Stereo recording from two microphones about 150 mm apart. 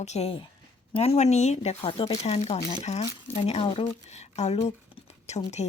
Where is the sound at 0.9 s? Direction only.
45° left (ahead or behind).